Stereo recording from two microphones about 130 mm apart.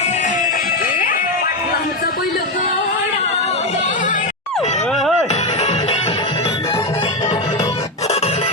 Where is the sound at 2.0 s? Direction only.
90° left.